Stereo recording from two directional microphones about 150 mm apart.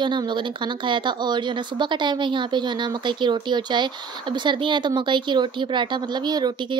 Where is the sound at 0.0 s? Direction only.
30° right (ahead or behind).